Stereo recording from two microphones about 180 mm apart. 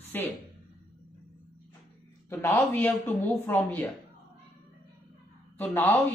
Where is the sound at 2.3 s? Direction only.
15° left (ahead or behind).